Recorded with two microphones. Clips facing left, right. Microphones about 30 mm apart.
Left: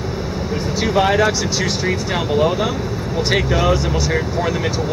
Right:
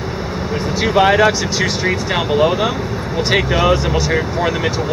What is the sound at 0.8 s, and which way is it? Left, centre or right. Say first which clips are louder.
Speech: right 4 dB; right.